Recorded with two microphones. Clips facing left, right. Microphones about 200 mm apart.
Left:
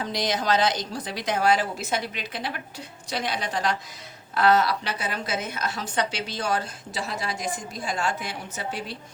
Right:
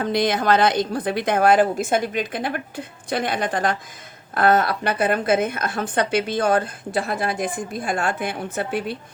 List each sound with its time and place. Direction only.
0.0 s a woman's voice: 55° right (ahead or behind)